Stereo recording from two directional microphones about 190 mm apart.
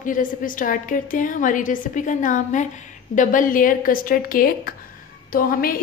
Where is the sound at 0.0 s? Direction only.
45° left (ahead or behind).